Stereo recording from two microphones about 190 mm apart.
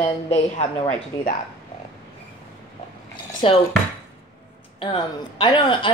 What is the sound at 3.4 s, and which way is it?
Speech, 30° left (ahead or behind).